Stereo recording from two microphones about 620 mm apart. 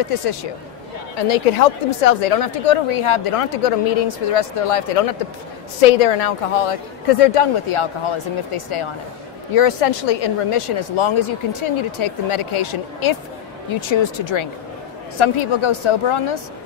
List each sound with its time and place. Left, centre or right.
0.0 s a woman's voice: left
1.1 s a woman's voice: left
5.8 s a woman's voice: left